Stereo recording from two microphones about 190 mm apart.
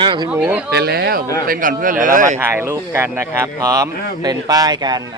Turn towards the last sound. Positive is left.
turn(degrees=-20)  # may be behind; listen again after turning